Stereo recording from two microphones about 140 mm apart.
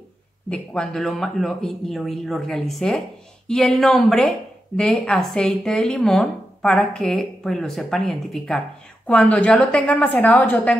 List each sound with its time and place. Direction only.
0.5 s a woman's voice: 5° left (ahead or behind)